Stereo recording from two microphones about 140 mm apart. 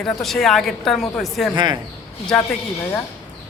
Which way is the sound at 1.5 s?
30° right (ahead or behind).